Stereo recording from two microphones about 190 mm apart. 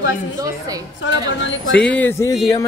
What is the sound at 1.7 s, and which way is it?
Music, 10° left (ahead or behind).